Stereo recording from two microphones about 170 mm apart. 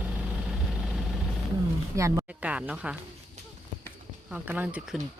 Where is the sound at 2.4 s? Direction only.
5° right (ahead or behind).